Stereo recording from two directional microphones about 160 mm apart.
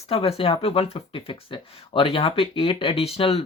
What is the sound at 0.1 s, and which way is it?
Speech, 35° left (ahead or behind).